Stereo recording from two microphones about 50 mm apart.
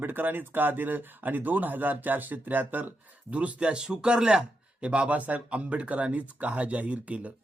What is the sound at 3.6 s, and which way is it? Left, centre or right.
Speech, centre.